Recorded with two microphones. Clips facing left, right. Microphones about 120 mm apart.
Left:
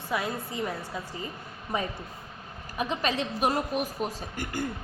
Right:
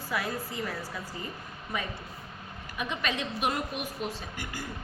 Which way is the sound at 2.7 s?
35° left (ahead or behind).